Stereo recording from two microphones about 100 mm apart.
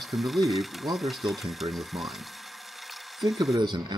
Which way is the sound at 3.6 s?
45° right (ahead or behind).